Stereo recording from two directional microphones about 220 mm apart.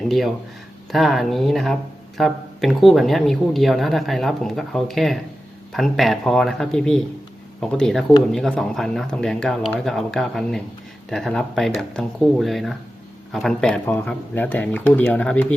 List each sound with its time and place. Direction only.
0.0 s speech: centre (ahead or behind)